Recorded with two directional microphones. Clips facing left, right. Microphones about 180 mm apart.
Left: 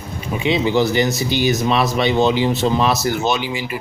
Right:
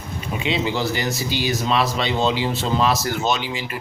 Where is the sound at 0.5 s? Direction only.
15° left (ahead or behind).